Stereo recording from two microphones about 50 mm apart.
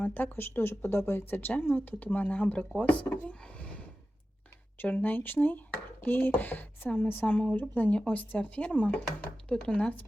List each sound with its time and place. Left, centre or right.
0.0 s speech: left
4.8 s speech: left
7.9 s speech: left